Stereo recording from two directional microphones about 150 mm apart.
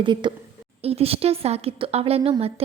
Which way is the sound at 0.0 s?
30° right (ahead or behind).